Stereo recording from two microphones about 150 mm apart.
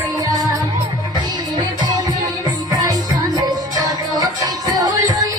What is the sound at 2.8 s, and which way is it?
Music, 25° right (ahead or behind).